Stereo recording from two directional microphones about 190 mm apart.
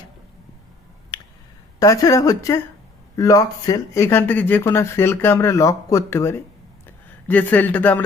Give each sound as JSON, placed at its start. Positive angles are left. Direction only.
{"t": 1.8, "sound": "speech", "side_deg": 15}